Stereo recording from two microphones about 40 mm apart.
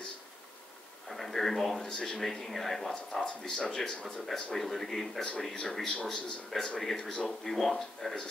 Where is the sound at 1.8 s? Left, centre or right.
Left.